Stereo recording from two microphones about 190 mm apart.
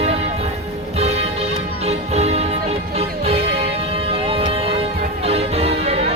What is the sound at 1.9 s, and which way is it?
Music, 35° right (ahead or behind).